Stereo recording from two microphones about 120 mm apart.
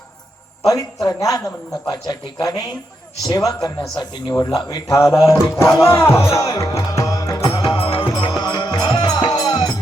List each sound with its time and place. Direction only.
0.6 s a man's voice: 30° left (ahead or behind)
7.7 s music: 50° left (ahead or behind)